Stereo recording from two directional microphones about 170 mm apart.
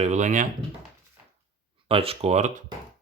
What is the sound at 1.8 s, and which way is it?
Speech, 35° right (ahead or behind).